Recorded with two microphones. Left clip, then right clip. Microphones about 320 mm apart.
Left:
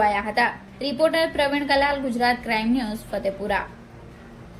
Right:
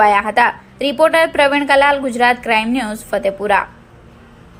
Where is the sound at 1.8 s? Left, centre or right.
Right.